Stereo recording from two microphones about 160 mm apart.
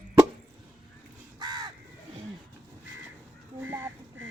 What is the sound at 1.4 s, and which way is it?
Crow, 25° right (ahead or behind).